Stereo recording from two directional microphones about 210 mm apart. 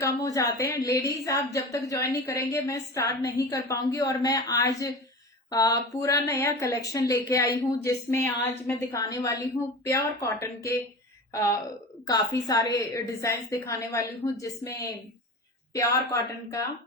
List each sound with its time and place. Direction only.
0.0 s a woman's voice: 15° left (ahead or behind)